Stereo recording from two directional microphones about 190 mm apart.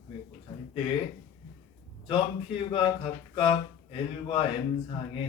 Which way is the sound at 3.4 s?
30° left (ahead or behind).